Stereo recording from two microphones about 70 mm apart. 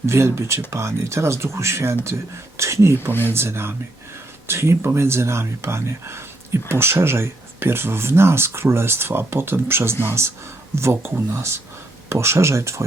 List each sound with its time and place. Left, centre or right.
0.0 s speech: right
3.1 s speech: left
3.3 s speech: right